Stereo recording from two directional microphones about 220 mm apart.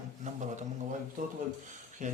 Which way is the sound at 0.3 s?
35° right (ahead or behind).